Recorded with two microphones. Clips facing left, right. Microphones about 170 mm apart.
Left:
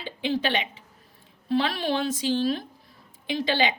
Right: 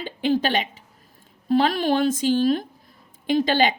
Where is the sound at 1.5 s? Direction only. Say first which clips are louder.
Right 5 dB; 45° right (ahead or behind).